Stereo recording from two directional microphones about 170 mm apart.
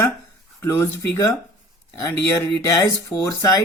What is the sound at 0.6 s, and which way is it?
Speech, 15° left (ahead or behind).